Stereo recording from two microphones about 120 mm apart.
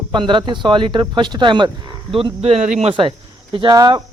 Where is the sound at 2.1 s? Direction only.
55° right (ahead or behind); by 2.9 s 80° right.